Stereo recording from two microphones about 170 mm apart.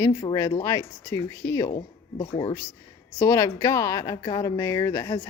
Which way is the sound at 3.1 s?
20° left (ahead or behind).